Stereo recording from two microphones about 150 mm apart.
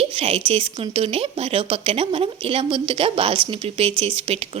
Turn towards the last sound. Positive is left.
turn(degrees=-40)  # may be behind; listen again after turning